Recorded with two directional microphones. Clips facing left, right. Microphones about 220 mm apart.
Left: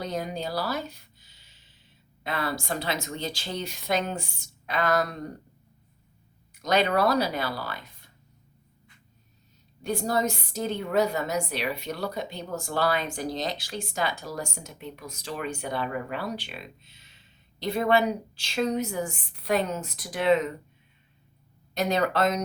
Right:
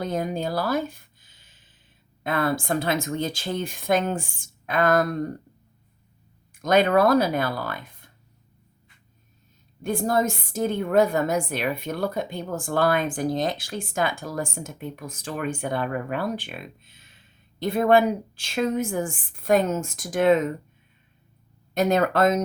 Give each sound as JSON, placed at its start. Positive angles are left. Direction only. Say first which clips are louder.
{"t": 0.0, "sound": "a sound", "louder": "right 5 dB", "side_deg": -50}
{"t": 2.2, "sound": "a woman's voice", "louder": "right 6 dB", "side_deg": -50}
{"t": 6.5, "sound": "speech", "louder": "right 5 dB", "side_deg": -50}
{"t": 9.8, "sound": "a woman's voice", "louder": "right 3 dB", "side_deg": -50}
{"t": 21.8, "sound": "a woman's voice", "louder": "right 4 dB", "side_deg": -50}